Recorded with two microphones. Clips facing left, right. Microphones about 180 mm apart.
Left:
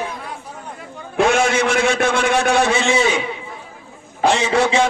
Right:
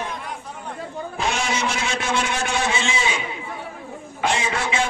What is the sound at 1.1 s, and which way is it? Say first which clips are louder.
A man's voice: left 10 dB; 55° left (ahead or behind).